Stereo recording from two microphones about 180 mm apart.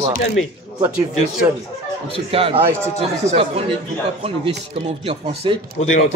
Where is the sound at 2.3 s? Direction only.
30° right (ahead or behind).